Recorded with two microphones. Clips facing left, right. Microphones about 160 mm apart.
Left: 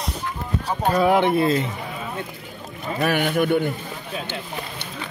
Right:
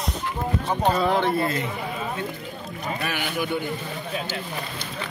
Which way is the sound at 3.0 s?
55° left (ahead or behind).